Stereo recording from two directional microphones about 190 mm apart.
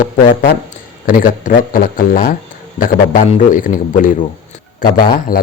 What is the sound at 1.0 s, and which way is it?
Speech, 45° left (ahead or behind).